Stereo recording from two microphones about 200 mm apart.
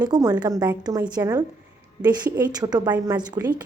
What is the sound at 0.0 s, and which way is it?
A woman's voice, 20° right (ahead or behind).